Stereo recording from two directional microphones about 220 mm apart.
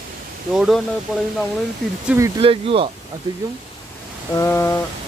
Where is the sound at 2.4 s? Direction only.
25° right (ahead or behind).